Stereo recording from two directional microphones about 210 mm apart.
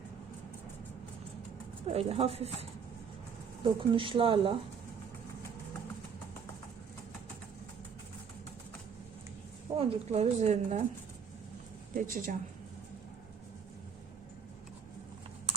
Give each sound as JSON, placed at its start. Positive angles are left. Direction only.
{"t": 1.9, "sound": "speech", "side_deg": -30}
{"t": 9.7, "sound": "speech", "side_deg": -30}
{"t": 11.9, "sound": "speech", "side_deg": -40}